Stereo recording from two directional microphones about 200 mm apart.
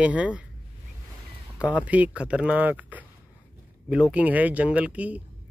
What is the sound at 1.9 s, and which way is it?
Speech, 5° right (ahead or behind).